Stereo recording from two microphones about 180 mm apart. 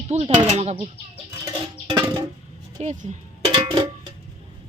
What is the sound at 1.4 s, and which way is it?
Music, 20° right (ahead or behind).